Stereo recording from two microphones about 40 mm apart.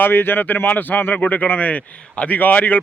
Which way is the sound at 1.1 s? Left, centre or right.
Left.